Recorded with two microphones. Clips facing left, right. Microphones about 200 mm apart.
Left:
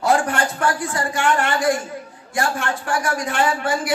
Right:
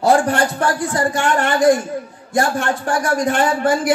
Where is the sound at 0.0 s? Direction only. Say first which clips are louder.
Right 4 dB; 35° right (ahead or behind).